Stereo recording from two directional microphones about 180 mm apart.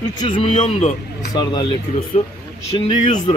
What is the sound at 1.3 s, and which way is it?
Speech, 25° left (ahead or behind).